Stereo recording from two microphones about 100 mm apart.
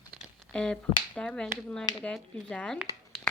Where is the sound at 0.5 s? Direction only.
10° left (ahead or behind).